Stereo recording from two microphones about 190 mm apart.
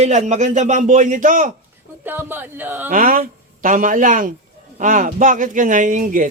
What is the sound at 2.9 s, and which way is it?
A man's voice, 45° right (ahead or behind).